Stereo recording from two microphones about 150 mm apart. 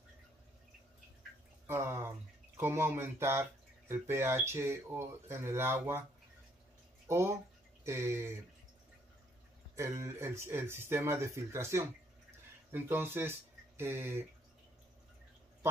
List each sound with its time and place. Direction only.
1.7 s speech: 15° right (ahead or behind)
7.1 s speech: 15° right (ahead or behind)
9.8 s speech: 20° right (ahead or behind)